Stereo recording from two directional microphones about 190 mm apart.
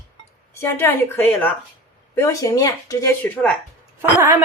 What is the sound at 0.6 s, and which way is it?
A woman's voice, 10° left (ahead or behind).